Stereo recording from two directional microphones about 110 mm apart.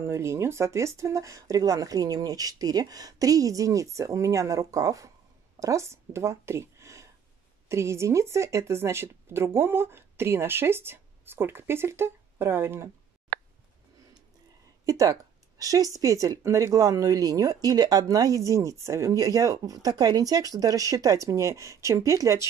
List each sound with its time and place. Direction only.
0.0 s speech: 25° right (ahead or behind)
14.9 s speech: 30° right (ahead or behind)